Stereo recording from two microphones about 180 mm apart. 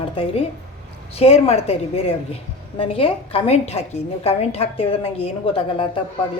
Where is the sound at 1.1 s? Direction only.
35° left (ahead or behind).